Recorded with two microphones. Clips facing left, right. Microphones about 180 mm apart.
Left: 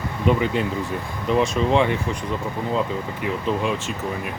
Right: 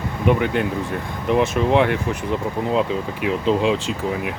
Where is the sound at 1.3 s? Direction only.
5° right (ahead or behind).